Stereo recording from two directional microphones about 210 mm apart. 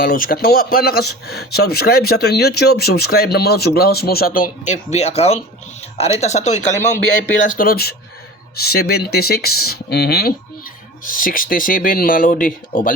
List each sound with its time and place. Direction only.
0.0 s speech: 45° left (ahead or behind)
4.6 s speech: 35° left (ahead or behind)
7.4 s speech: 45° left (ahead or behind)